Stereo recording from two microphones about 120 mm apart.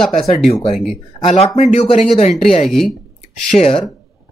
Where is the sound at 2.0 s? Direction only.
65° left (ahead or behind).